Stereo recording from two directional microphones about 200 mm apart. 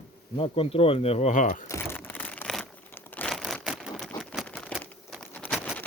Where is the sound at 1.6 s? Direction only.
10° left (ahead or behind).